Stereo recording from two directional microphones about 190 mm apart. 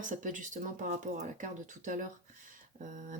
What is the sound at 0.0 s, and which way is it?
Speech, 45° right (ahead or behind).